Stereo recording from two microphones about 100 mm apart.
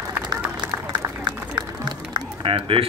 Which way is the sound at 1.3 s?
45° right (ahead or behind).